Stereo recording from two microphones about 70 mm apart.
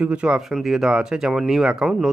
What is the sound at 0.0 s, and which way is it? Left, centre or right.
Speech, centre.